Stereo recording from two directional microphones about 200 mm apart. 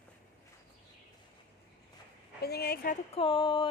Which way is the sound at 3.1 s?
25° left (ahead or behind).